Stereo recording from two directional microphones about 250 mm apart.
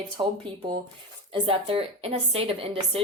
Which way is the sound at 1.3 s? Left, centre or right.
Right.